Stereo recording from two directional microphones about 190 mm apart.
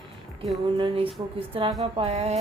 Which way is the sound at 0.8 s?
30° right (ahead or behind).